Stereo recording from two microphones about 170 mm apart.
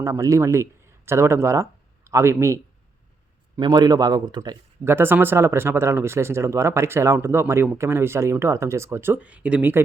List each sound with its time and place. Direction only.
0.0 s speech: 20° right (ahead or behind)